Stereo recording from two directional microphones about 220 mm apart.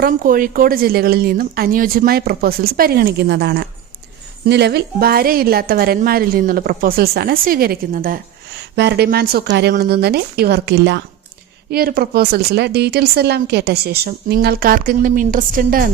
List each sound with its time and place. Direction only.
0.0 s speech: 40° right (ahead or behind)